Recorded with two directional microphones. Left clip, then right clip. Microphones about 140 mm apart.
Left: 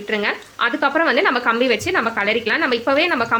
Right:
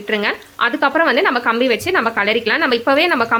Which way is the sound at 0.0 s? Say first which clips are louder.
Right 2 dB; 30° right (ahead or behind).